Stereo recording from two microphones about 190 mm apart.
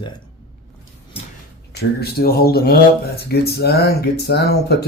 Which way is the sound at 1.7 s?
55° left (ahead or behind).